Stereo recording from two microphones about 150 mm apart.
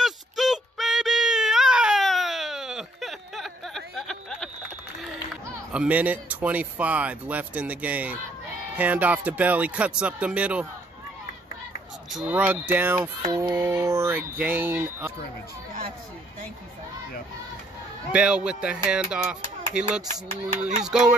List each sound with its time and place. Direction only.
0.0 s a sound: centre (ahead or behind)
5.7 s speech: 10° right (ahead or behind)
12.3 s speech: 15° right (ahead or behind)
18.1 s speech: 5° right (ahead or behind)